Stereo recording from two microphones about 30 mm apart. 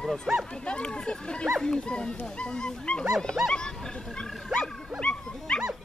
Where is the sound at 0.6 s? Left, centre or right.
Left.